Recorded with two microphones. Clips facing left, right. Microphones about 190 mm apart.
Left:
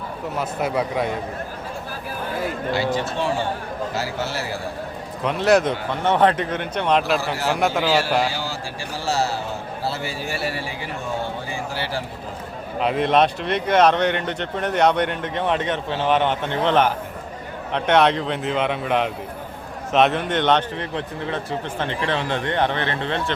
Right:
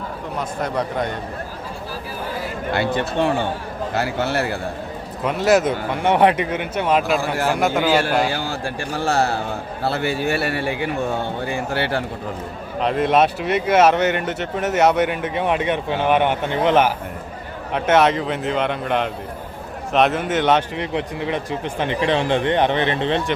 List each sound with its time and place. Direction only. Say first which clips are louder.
0.3 s speech: left 1 dB; 5° left (ahead or behind)
2.7 s a man's voice: right 4 dB; 60° right (ahead or behind)
5.2 s a man's voice: right 1 dB; 5° right (ahead or behind)
7.2 s a man's voice: right 3 dB; 50° right (ahead or behind)
7.5 s speech: right 1 dB; centre (ahead or behind)
8.3 s a man's voice: right 4 dB; 55° right (ahead or behind)
12.8 s a man's voice: right 1 dB; centre (ahead or behind); by 23.3 s 20° right (ahead or behind)